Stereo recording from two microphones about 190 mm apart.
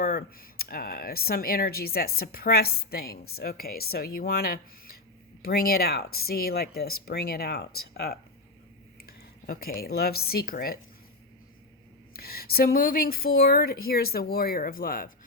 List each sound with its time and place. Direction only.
0.0 s speech: 50° left (ahead or behind)
12.1 s speech: 55° left (ahead or behind)